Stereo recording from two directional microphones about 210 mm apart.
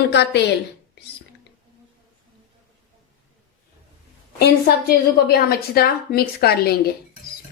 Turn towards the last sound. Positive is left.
turn(degrees=50)  # may be behind; listen again after turning